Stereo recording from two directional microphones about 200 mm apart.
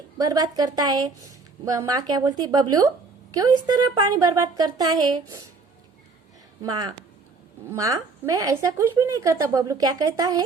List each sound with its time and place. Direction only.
0.2 s music: 20° right (ahead or behind)
6.6 s music: 20° right (ahead or behind)
7.7 s a woman's voice: 15° right (ahead or behind)